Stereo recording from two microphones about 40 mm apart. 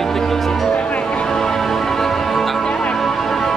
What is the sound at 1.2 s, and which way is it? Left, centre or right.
Music, centre.